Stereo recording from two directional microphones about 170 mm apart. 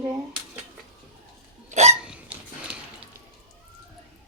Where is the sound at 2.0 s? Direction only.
5° right (ahead or behind).